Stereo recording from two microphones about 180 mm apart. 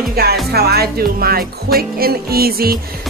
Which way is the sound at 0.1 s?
60° right (ahead or behind).